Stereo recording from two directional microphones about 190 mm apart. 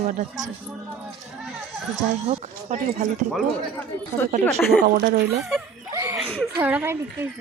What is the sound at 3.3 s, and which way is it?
Speech, 10° left (ahead or behind).